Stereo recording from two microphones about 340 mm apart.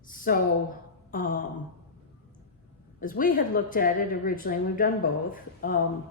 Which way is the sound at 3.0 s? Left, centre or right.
Left.